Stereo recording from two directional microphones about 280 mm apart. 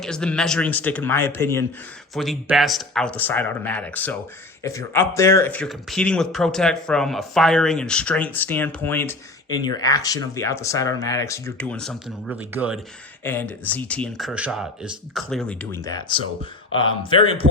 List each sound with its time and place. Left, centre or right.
0.0 s speech: centre
13.2 s speech: centre
16.2 s speech: left
17.0 s speech: centre